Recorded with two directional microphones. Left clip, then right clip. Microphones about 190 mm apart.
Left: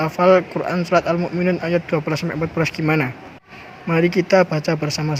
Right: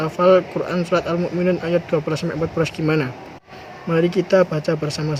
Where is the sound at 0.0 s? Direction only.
20° left (ahead or behind).